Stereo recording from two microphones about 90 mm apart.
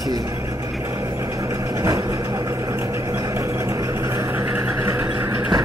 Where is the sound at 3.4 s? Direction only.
35° right (ahead or behind).